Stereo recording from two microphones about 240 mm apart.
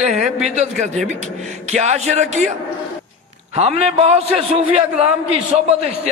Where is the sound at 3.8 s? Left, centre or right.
Right.